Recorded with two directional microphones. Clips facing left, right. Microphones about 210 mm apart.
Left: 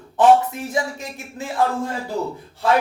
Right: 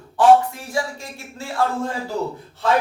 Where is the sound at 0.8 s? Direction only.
20° left (ahead or behind).